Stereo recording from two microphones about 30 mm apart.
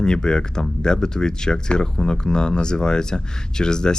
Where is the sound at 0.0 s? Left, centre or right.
Left.